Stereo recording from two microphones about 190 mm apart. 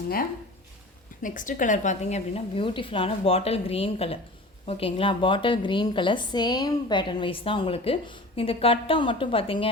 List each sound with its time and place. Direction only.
1.2 s a woman's voice: 45° left (ahead or behind); by 9.6 s 30° left (ahead or behind)